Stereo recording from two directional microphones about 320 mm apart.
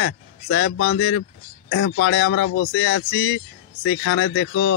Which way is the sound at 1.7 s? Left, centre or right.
Left.